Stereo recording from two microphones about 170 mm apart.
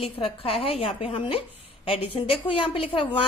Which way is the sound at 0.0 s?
35° left (ahead or behind).